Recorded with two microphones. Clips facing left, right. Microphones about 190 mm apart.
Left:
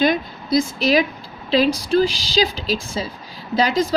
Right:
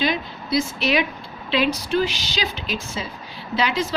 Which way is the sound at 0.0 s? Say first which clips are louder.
Left 5 dB; 45° left (ahead or behind).